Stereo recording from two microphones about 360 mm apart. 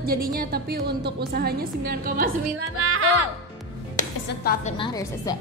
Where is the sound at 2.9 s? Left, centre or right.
Right.